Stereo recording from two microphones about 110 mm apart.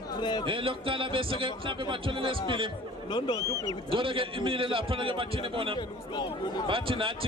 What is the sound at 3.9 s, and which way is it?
Speech, 55° right (ahead or behind).